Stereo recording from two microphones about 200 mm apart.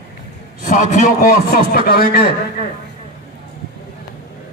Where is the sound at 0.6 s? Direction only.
40° left (ahead or behind).